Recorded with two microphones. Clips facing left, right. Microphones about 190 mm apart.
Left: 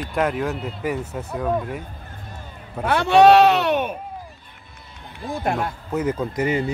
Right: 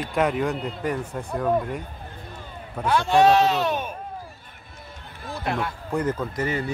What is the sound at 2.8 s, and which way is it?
Speech, 65° left (ahead or behind).